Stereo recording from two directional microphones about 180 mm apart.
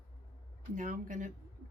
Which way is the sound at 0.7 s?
45° right (ahead or behind).